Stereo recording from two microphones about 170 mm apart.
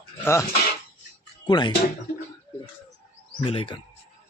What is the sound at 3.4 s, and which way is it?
Speech, 30° left (ahead or behind).